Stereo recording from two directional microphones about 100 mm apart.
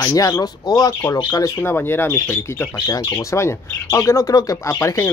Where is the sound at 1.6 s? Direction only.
20° left (ahead or behind).